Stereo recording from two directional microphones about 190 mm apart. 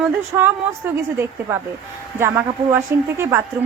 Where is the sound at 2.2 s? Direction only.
10° right (ahead or behind).